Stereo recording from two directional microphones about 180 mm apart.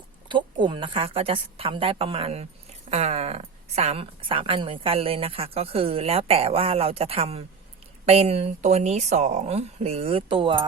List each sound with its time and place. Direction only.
0.3 s a woman's voice: 25° right (ahead or behind)